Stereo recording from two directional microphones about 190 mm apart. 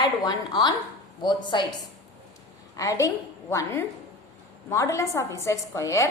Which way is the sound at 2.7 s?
15° left (ahead or behind).